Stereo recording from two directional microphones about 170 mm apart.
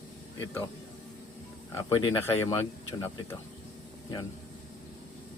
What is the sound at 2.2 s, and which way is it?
Speech, 15° left (ahead or behind).